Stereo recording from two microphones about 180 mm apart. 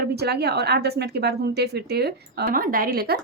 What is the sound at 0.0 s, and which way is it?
A woman's voice, 65° right (ahead or behind).